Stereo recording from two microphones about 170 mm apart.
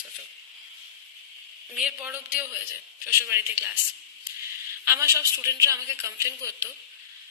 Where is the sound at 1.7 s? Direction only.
5° right (ahead or behind).